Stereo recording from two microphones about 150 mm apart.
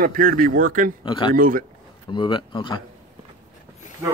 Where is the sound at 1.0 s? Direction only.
30° left (ahead or behind).